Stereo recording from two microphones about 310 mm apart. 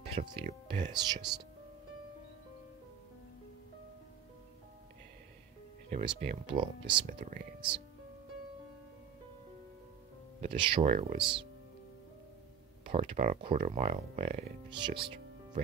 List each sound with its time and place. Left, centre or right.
0.1 s speech: centre
5.9 s speech: right
7.2 s speech: right
10.4 s speech: centre
12.8 s speech: centre